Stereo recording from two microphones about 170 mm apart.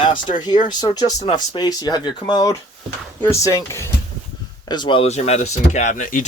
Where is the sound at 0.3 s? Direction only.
25° left (ahead or behind).